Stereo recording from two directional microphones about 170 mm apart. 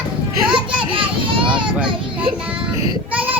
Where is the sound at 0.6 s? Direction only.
30° right (ahead or behind).